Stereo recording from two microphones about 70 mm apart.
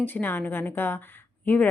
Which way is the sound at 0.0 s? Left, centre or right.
Left.